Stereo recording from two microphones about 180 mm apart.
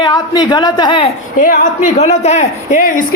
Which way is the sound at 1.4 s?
45° left (ahead or behind).